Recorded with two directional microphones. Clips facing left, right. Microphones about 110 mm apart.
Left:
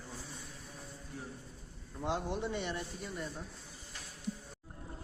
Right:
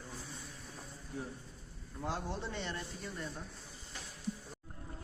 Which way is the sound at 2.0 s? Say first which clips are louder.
Left 4 dB; 20° left (ahead or behind).